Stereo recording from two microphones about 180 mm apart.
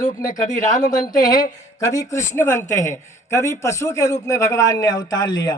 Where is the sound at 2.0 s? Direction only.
15° left (ahead or behind).